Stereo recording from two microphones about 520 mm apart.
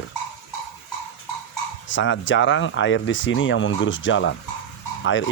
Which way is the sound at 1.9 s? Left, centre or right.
Left.